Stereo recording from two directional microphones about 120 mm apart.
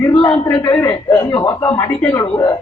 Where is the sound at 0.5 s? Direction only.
40° left (ahead or behind).